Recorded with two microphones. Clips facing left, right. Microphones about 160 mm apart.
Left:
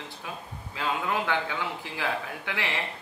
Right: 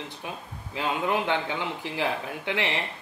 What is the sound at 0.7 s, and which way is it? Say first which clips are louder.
A man's voice: right 2 dB; 20° right (ahead or behind).